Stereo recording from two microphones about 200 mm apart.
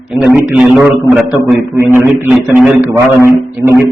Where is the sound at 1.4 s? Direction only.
15° right (ahead or behind).